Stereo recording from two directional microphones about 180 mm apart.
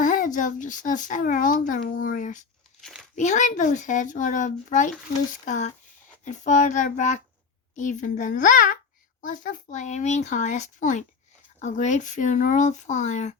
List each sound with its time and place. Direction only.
0.0 s a child's voice: 45° left (ahead or behind)